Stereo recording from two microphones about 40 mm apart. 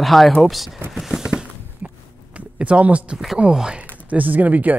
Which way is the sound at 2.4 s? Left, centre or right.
Right.